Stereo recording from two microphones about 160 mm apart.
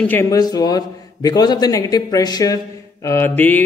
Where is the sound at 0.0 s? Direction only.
10° left (ahead or behind).